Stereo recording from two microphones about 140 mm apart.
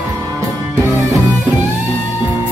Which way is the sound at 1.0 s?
25° right (ahead or behind).